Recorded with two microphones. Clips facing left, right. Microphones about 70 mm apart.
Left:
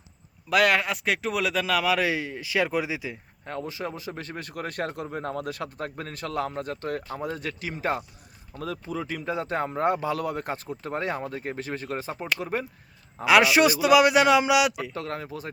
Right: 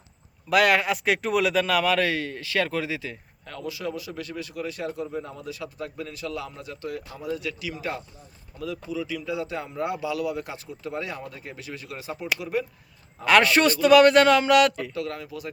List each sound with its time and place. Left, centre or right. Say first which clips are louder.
0.5 s a man's voice: right 2 dB; centre
3.4 s a man's voice: even; left
13.2 s a man's voice: even; centre
14.9 s speech: right 1 dB; left